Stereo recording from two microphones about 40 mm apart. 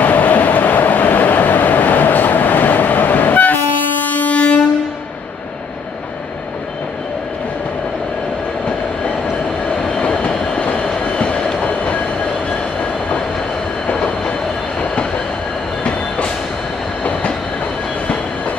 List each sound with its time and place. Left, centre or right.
0.0 s train: left
3.5 s wind instrument: left
9.9 s train: left